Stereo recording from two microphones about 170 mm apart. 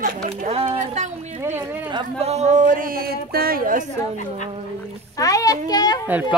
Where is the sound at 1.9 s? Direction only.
30° right (ahead or behind); by 3.8 s 55° right (ahead or behind).